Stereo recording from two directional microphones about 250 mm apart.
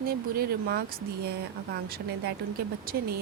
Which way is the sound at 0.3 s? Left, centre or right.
Right.